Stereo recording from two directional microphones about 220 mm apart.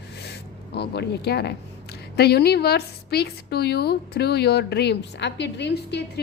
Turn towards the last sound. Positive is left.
turn(degrees=50)  # may be behind; listen again after turning